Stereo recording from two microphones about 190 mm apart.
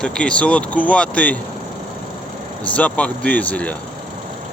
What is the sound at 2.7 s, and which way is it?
Speech, 5° left (ahead or behind).